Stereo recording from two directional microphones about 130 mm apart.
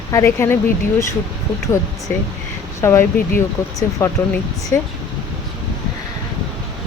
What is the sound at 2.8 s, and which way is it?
Speech, 20° left (ahead or behind).